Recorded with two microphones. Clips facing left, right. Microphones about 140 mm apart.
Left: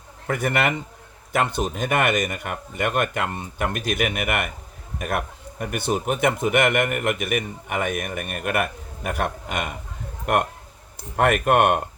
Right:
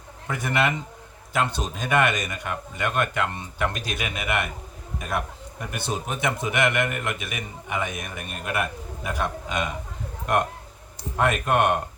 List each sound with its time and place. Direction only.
0.3 s speech: 55° left (ahead or behind)
11.2 s speech: 60° left (ahead or behind)